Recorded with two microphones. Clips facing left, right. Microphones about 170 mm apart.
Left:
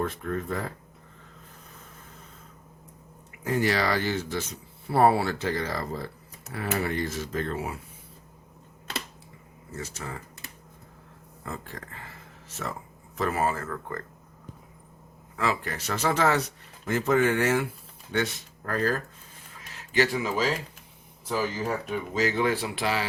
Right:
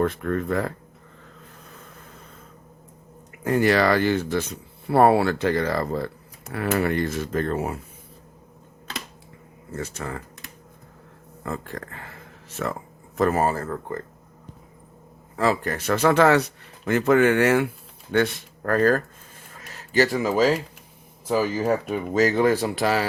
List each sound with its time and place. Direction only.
0.0 s speech: 70° right (ahead or behind)
3.4 s speech: 55° right (ahead or behind)
9.7 s speech: 55° right (ahead or behind)
11.4 s speech: 55° right (ahead or behind)
13.1 s speech: 45° right (ahead or behind)
15.4 s speech: 45° right (ahead or behind)
19.9 s speech: 40° right (ahead or behind)
21.8 s speech: 45° right (ahead or behind)